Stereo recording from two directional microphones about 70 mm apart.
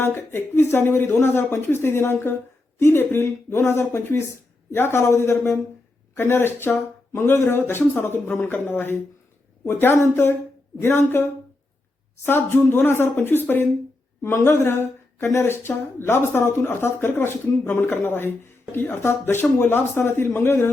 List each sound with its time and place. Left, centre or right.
0.0 s speech: left